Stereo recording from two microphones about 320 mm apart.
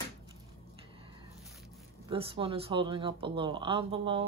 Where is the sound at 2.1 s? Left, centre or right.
Centre.